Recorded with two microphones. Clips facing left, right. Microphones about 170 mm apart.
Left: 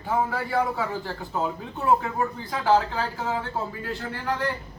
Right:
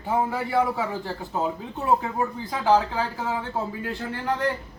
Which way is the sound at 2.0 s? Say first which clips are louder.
Right 1 dB; 20° right (ahead or behind).